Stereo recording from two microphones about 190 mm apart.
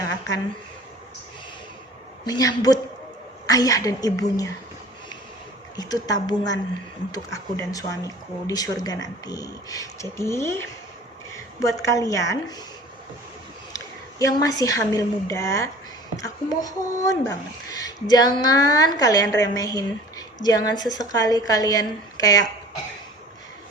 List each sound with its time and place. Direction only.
0.0 s a sound: 20° left (ahead or behind)
2.2 s a woman's voice: 20° left (ahead or behind)
5.7 s a woman's voice: 20° left (ahead or behind)
13.7 s a woman's voice: 20° left (ahead or behind)